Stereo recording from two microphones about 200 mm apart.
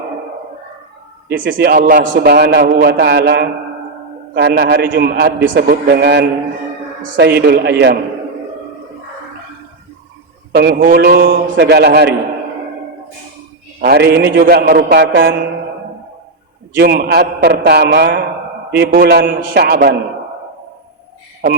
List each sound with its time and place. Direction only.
1.3 s a man's voice: 60° right (ahead or behind)
10.5 s a man's voice: 50° right (ahead or behind)
13.8 s a man's voice: 55° right (ahead or behind)
16.7 s a man's voice: 50° right (ahead or behind)